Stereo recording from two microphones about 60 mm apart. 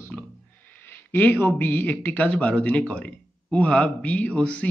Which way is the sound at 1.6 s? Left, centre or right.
Left.